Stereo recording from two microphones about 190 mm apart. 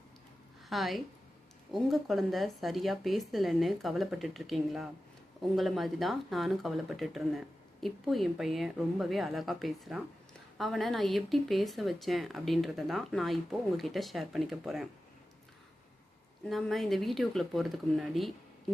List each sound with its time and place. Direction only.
0.7 s speech: centre (ahead or behind)
16.5 s speech: centre (ahead or behind)